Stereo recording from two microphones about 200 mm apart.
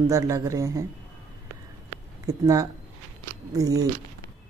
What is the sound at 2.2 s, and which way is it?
Speech, 15° right (ahead or behind).